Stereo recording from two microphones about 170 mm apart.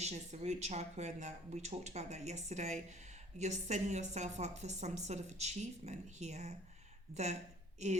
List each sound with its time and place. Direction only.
0.0 s a woman's voice: 40° right (ahead or behind)